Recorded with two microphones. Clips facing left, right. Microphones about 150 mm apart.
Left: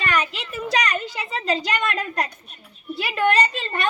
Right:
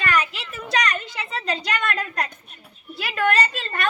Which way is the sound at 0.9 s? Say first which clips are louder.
Left 1 dB; 30° left (ahead or behind).